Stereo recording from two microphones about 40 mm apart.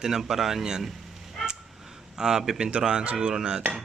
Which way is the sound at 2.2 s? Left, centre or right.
Centre.